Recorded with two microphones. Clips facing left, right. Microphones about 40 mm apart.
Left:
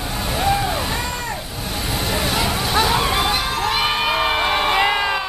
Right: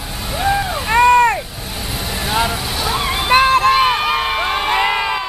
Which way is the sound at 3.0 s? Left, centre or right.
Centre.